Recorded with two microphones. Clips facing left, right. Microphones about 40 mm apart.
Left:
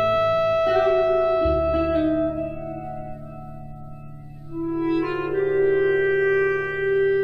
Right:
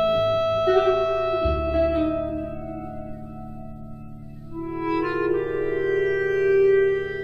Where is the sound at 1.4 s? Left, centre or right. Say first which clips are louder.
Left 3 dB; left.